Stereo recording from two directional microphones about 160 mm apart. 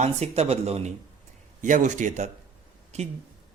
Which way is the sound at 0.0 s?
40° right (ahead or behind).